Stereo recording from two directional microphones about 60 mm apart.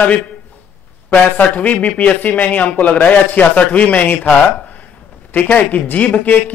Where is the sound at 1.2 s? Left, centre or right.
Left.